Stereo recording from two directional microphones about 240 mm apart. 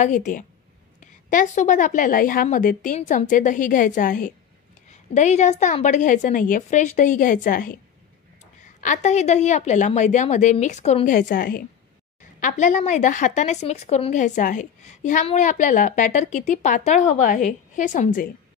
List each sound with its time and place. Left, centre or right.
0.0 s a woman's voice: left
8.8 s a woman's voice: left